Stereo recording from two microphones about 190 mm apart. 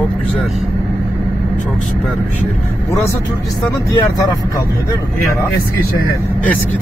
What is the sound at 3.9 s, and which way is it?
Speech, 20° left (ahead or behind).